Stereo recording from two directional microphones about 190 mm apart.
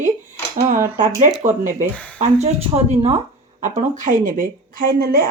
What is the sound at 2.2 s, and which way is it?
Speech, 35° right (ahead or behind).